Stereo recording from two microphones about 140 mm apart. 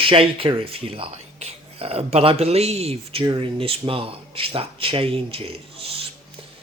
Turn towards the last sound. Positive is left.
turn(degrees=-40)  # may be behind; listen again after turning